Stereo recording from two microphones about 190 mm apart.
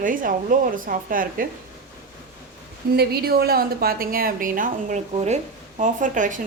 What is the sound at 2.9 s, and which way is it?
A woman's voice, 55° right (ahead or behind).